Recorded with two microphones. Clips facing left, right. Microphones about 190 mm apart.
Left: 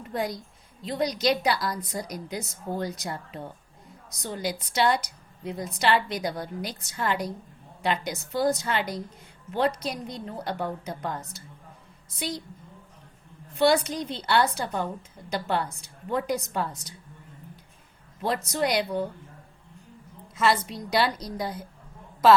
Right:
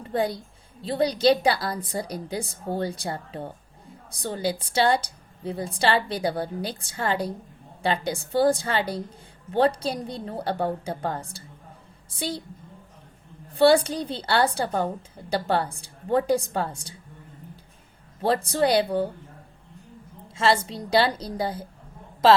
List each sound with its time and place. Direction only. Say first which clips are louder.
0.0 s a woman's voice: right 4 dB; 30° right (ahead or behind)
13.5 s a woman's voice: right 4 dB; 30° right (ahead or behind)
18.2 s a woman's voice: right 4 dB; 30° right (ahead or behind)
20.2 s a woman's voice: right 2 dB; 30° right (ahead or behind)